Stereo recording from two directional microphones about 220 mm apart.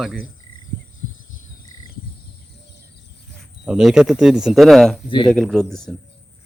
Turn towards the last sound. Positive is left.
turn(degrees=5)  # may be behind; listen again after turning